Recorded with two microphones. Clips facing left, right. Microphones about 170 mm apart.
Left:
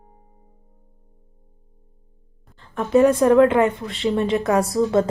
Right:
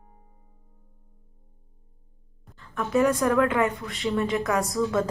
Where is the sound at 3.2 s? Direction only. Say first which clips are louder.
Left 8 dB; 35° left (ahead or behind).